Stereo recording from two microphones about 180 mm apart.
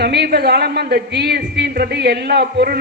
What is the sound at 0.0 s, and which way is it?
A man's voice, 65° right (ahead or behind).